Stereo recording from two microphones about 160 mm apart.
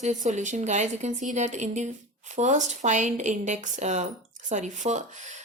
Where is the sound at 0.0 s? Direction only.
50° right (ahead or behind).